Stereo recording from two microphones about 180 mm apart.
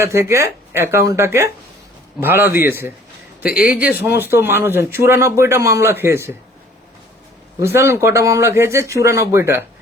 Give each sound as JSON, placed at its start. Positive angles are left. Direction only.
{"t": 0.0, "sound": "speech", "side_deg": -15}
{"t": 4.0, "sound": "speech", "side_deg": -10}
{"t": 7.6, "sound": "speech", "side_deg": -15}